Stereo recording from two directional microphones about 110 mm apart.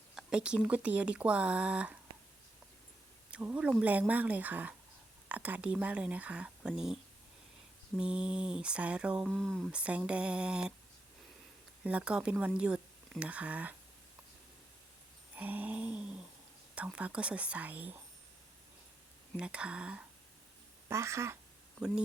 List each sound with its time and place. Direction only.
0.1 s speech: 5° right (ahead or behind)
3.3 s speech: 10° right (ahead or behind)
9.3 s speech: 5° left (ahead or behind)
9.7 s speech: 10° right (ahead or behind)
11.8 s speech: 10° right (ahead or behind)
15.4 s a sound: 15° right (ahead or behind)
16.7 s speech: 10° right (ahead or behind)
19.4 s speech: 10° right (ahead or behind)
20.8 s speech: 25° right (ahead or behind)
21.8 s speech: 10° right (ahead or behind)